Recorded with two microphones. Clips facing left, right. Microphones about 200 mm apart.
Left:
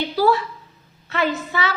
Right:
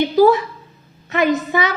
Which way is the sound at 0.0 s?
20° right (ahead or behind).